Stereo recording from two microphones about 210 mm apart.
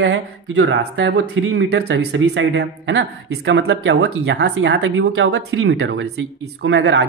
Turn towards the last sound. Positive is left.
turn(degrees=-55)  # may be behind; listen again after turning